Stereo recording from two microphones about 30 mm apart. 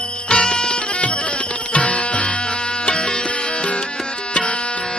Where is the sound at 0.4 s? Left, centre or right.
Left.